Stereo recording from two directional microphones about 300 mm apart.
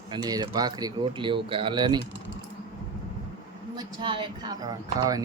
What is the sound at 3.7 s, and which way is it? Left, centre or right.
A man's voice, centre.